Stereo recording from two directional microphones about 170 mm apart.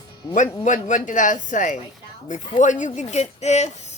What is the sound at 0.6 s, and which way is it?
Speech, 45° left (ahead or behind).